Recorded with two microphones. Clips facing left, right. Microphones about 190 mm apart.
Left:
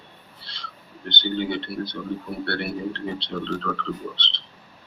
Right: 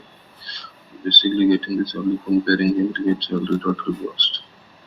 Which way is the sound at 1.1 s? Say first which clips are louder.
Right 10 dB; 50° right (ahead or behind).